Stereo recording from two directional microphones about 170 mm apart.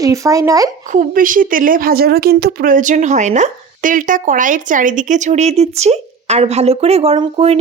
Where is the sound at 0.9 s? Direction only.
50° right (ahead or behind).